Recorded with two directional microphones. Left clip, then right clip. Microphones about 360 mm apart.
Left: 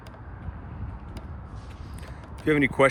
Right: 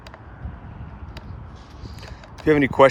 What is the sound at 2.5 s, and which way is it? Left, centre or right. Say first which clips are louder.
Speech: right 5 dB; centre.